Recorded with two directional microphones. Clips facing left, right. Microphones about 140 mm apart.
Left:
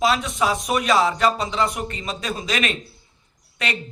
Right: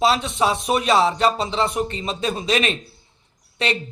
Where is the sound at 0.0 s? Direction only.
25° right (ahead or behind).